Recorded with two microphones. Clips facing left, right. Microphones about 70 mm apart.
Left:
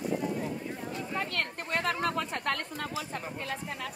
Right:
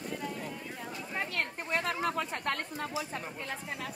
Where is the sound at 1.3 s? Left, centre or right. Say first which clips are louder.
Left 1 dB; left.